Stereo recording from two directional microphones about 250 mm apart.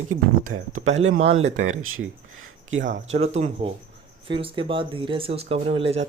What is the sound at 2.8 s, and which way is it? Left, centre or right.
Speech, right.